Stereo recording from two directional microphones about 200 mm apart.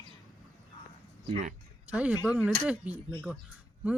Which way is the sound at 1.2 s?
35° right (ahead or behind).